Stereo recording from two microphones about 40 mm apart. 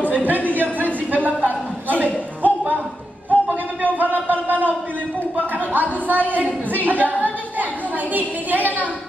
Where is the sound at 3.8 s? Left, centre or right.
Right.